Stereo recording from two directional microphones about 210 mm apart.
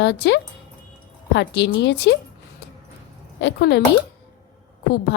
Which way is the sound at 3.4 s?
55° left (ahead or behind).